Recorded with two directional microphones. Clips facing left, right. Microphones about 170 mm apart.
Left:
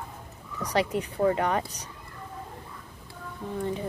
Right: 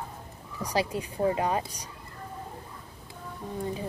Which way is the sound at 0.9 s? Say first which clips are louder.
Left 2 dB; 15° right (ahead or behind).